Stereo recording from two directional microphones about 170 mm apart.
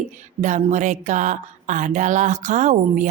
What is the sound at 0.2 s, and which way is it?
A woman's voice, 45° right (ahead or behind).